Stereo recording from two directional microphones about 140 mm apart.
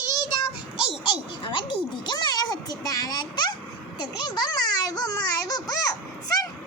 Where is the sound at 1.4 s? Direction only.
35° left (ahead or behind).